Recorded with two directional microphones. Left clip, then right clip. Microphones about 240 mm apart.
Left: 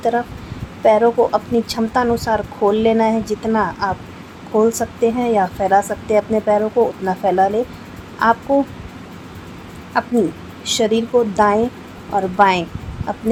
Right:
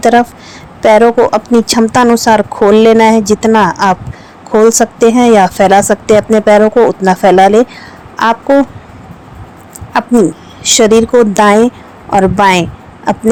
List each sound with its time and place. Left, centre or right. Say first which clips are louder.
0.0 s speech: right 11 dB; right
9.9 s speech: right 8 dB; right